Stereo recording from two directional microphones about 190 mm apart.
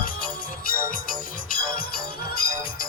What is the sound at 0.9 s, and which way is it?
Music, 45° left (ahead or behind).